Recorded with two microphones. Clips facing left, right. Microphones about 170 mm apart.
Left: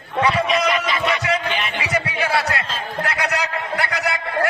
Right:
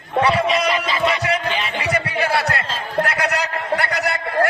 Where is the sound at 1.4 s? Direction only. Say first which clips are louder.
Right 1 dB; 35° right (ahead or behind).